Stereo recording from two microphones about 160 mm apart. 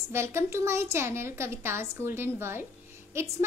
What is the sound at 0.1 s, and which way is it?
A woman's voice, 15° right (ahead or behind).